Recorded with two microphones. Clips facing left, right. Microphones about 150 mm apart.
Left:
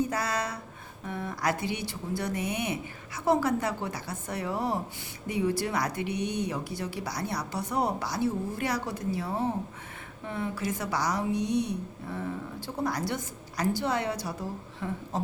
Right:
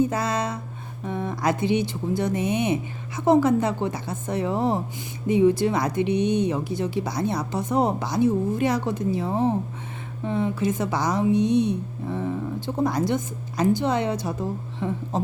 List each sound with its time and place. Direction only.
0.0 s speech: 25° right (ahead or behind)